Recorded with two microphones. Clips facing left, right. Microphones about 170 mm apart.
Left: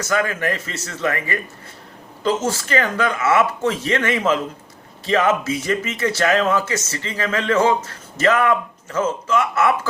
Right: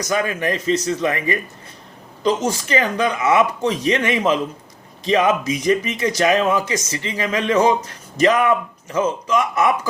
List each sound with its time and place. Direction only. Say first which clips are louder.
0.0 s speech: even; 15° right (ahead or behind)